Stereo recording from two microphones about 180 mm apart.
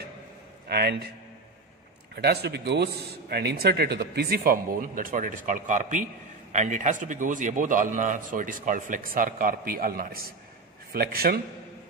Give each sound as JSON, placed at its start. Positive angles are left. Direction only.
{"t": 0.7, "sound": "a man's voice", "side_deg": -65}
{"t": 2.1, "sound": "a man's voice", "side_deg": -65}